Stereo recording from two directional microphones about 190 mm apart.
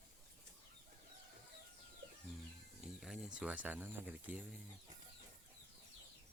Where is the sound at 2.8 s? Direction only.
5° right (ahead or behind).